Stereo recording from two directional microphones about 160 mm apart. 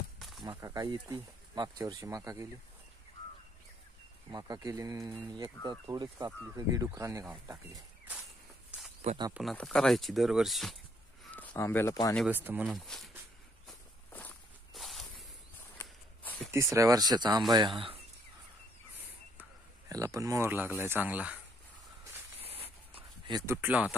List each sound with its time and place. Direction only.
0.2 s a sound: centre (ahead or behind)
0.5 s speech: 20° right (ahead or behind)
4.3 s speech: 25° right (ahead or behind)
9.3 s speech: centre (ahead or behind)
11.3 s speech: 15° left (ahead or behind)
12.3 s speech: 10° right (ahead or behind)
12.7 s speech: centre (ahead or behind)
14.7 s a sound: centre (ahead or behind)
15.8 s walk: 10° left (ahead or behind)
16.5 s speech: 20° right (ahead or behind)
19.9 s speech: 20° right (ahead or behind)
22.4 s a sound: 35° right (ahead or behind)
23.3 s speech: 15° right (ahead or behind)